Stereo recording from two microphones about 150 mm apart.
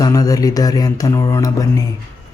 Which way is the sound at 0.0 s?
25° left (ahead or behind).